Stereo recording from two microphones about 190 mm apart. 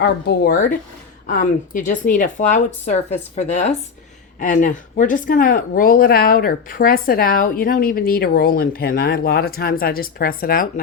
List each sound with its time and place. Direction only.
0.0 s speech: 55° left (ahead or behind)